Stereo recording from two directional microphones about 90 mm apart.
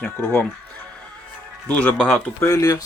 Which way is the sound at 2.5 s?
40° left (ahead or behind).